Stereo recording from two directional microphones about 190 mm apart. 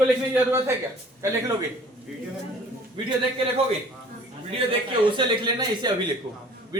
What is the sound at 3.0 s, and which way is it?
Speech, 25° right (ahead or behind).